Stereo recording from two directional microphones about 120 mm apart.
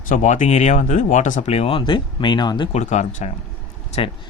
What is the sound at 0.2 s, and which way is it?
Speech, 85° left.